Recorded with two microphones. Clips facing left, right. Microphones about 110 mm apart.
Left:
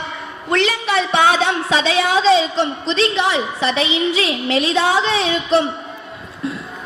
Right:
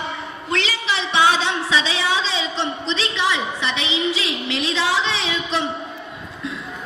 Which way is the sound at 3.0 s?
60° left (ahead or behind).